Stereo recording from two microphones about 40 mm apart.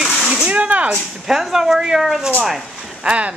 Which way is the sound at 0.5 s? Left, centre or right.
Right.